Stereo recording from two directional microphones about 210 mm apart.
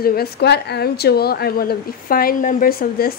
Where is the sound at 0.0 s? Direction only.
45° left (ahead or behind).